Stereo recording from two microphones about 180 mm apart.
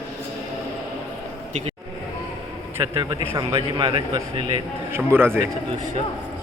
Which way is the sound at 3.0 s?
20° right (ahead or behind).